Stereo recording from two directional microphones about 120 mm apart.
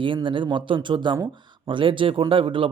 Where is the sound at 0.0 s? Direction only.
45° right (ahead or behind).